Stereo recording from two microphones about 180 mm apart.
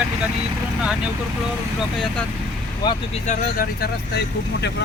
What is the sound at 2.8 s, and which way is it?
Speech, 35° left (ahead or behind).